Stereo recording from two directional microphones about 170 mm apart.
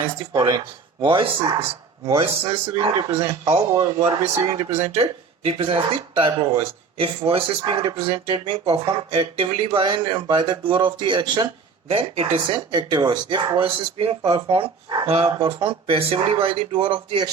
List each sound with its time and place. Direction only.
0.3 s speech: 25° right (ahead or behind)
5.5 s speech: 30° right (ahead or behind)
14.2 s speech: 15° right (ahead or behind)
14.4 s speech: 35° right (ahead or behind)